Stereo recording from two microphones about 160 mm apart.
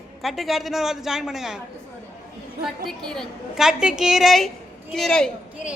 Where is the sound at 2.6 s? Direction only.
Centre (ahead or behind).